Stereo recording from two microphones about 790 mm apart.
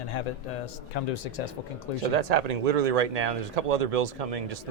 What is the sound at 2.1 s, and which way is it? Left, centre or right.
Speech, right.